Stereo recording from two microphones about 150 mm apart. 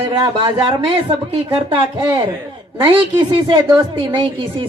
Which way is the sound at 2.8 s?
30° right (ahead or behind).